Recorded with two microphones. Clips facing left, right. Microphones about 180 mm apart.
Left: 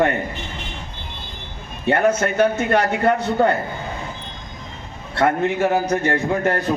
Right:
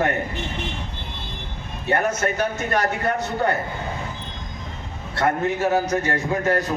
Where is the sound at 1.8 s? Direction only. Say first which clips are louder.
Left 4 dB; 60° left (ahead or behind).